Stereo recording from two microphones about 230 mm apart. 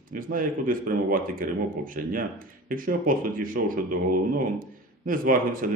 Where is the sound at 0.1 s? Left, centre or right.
Right.